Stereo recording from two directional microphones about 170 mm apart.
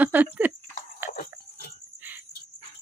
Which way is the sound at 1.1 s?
55° left (ahead or behind).